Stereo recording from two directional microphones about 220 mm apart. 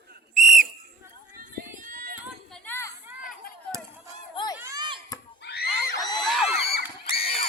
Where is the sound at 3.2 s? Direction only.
40° left (ahead or behind).